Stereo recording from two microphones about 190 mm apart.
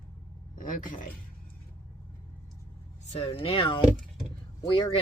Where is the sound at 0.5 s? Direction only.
45° left (ahead or behind).